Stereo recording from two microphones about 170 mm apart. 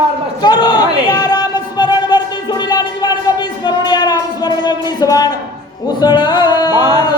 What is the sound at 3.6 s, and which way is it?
Music, 25° left (ahead or behind).